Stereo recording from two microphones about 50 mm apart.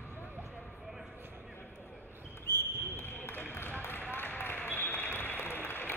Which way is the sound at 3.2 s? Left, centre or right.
Left.